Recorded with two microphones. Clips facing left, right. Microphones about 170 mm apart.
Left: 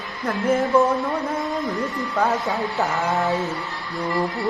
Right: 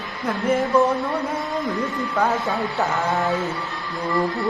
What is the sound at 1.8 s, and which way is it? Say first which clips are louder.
Speech: right 1 dB; 10° left (ahead or behind).